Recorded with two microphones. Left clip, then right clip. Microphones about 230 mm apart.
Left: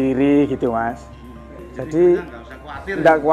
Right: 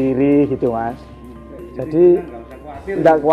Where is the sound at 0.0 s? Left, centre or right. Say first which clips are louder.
Right 2 dB; left.